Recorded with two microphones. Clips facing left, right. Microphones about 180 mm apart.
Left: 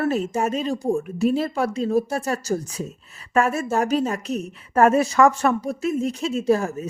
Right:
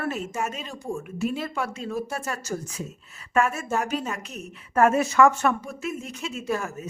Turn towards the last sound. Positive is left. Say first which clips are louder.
# left 8 dB
turn(degrees=35)  # may be behind; listen again after turning